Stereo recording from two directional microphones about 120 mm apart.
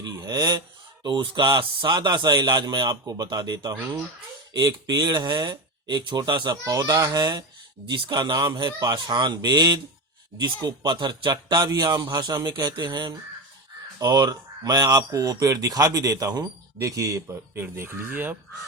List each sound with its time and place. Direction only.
0.0 s speech: 30° right (ahead or behind); by 18.3 s 15° right (ahead or behind)